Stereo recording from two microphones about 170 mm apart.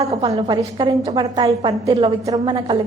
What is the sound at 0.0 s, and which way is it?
A woman's voice, 35° right (ahead or behind).